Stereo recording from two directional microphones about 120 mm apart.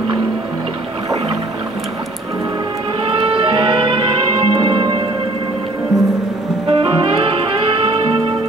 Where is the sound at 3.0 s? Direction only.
50° right (ahead or behind).